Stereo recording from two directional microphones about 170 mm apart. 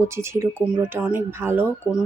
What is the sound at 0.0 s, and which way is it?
Speech, 15° right (ahead or behind).